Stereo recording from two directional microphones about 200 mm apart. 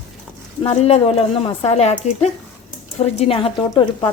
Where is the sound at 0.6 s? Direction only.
30° left (ahead or behind).